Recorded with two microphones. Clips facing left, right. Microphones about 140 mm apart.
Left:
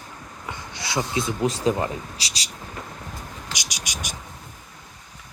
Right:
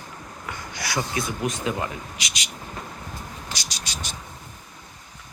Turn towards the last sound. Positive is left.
turn(degrees=15)  # may be behind; listen again after turning